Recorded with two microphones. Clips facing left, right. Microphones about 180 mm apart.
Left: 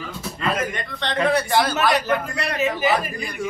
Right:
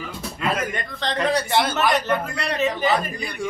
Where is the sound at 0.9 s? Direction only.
Centre (ahead or behind).